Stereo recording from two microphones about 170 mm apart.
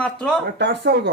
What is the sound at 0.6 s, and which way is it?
Speech, 85° right.